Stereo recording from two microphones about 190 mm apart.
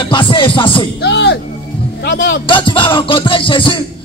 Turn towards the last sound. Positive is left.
turn(degrees=25)  # may be behind; listen again after turning